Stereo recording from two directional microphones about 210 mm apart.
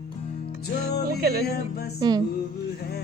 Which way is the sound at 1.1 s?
45° right (ahead or behind).